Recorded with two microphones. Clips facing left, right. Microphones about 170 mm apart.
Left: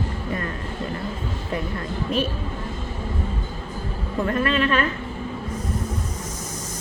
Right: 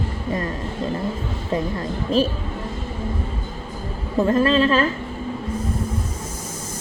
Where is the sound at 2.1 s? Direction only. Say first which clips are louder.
Right 5 dB; 90° right.